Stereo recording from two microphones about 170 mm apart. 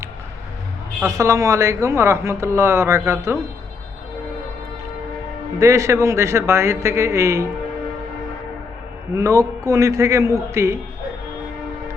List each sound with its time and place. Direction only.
1.0 s speech: 20° right (ahead or behind)
5.5 s speech: 20° right (ahead or behind)
9.1 s speech: 20° right (ahead or behind)